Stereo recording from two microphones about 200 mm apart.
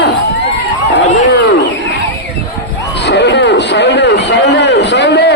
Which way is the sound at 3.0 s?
60° left (ahead or behind).